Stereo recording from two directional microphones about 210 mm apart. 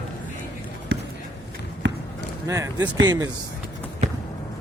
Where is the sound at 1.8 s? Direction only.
55° right (ahead or behind).